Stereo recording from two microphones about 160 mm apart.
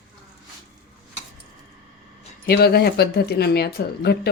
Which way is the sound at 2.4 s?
80° left.